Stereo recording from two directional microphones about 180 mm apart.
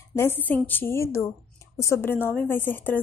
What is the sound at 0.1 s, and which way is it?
A woman's voice, 10° left (ahead or behind).